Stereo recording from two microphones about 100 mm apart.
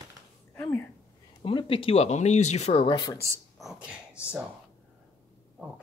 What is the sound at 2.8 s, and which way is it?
Speech, 45° left (ahead or behind).